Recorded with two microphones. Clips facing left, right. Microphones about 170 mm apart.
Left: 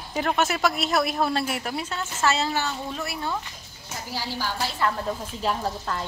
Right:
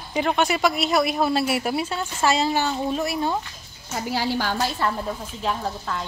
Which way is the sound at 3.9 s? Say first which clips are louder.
Right 8 dB; 65° right (ahead or behind).